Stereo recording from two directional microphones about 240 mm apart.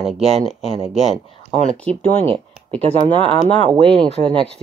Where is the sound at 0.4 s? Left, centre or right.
Centre.